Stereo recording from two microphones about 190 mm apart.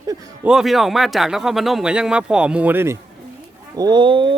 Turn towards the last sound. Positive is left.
turn(degrees=-25)  # may be behind; listen again after turning